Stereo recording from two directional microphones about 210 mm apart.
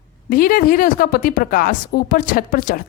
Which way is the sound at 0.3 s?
45° left (ahead or behind).